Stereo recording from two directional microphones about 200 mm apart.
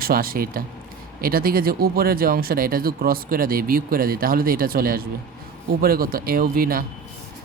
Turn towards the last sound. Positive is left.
turn(degrees=-45)  # may be behind; listen again after turning